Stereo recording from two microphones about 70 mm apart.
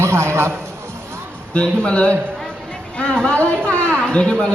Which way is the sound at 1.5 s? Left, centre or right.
Centre.